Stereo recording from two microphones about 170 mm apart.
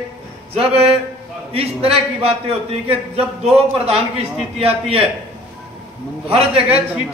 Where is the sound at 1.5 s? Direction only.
35° right (ahead or behind).